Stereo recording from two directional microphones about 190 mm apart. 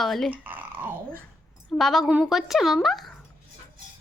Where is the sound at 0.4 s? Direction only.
10° right (ahead or behind).